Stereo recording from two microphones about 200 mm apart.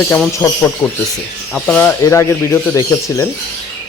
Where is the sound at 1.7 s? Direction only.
10° left (ahead or behind).